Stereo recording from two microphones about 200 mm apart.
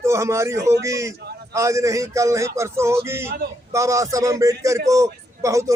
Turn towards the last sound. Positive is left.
turn(degrees=-15)  # may be behind; listen again after turning